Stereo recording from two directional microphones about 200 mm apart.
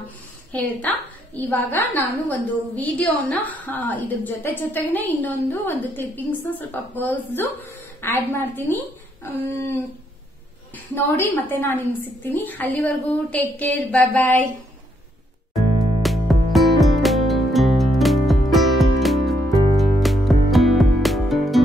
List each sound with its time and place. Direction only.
1.4 s a woman's voice: 10° left (ahead or behind)
15.5 s music: centre (ahead or behind)